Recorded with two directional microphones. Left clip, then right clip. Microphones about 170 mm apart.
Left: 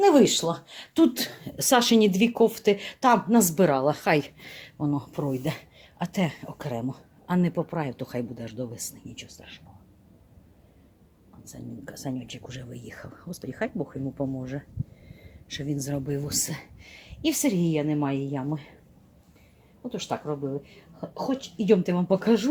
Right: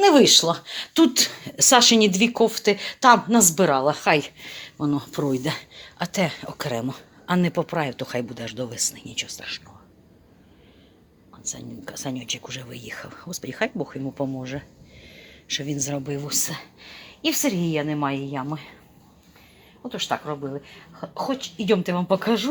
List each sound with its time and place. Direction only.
0.0 s speech: 5° left (ahead or behind)
11.4 s speech: 10° left (ahead or behind)
19.9 s speech: 10° left (ahead or behind)